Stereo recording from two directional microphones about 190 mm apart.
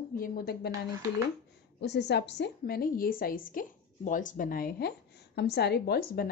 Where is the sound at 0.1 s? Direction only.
50° left (ahead or behind).